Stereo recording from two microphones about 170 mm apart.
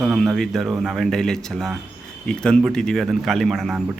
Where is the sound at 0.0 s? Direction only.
Centre (ahead or behind).